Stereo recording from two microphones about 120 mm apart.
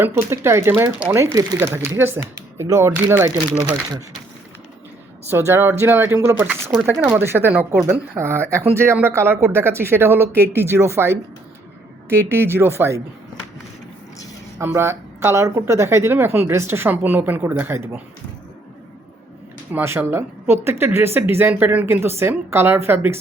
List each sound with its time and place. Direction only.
0.0 s speech: 20° right (ahead or behind)
5.3 s speech: 20° right (ahead or behind)
14.6 s speech: 20° right (ahead or behind)
19.7 s speech: 20° right (ahead or behind)